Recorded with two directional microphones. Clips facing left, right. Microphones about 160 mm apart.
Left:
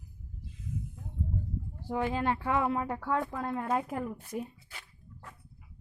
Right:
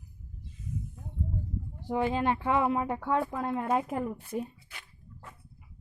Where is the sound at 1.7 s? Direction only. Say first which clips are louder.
Right 3 dB; 20° right (ahead or behind).